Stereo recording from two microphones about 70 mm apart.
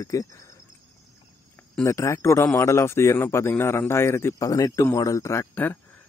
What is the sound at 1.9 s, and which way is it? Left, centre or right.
Speech, left.